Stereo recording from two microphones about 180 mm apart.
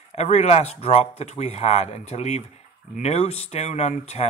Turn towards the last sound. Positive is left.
turn(degrees=40)  # may be behind; listen again after turning